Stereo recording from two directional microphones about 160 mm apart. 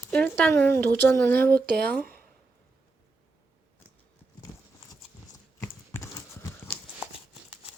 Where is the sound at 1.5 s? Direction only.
75° right (ahead or behind).